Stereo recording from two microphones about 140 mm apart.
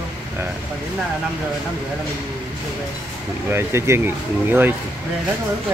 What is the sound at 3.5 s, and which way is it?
Speech, 15° right (ahead or behind).